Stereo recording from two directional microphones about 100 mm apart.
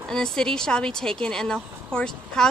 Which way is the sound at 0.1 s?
5° left (ahead or behind).